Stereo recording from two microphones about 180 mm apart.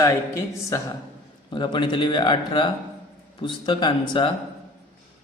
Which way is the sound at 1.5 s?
25° left (ahead or behind).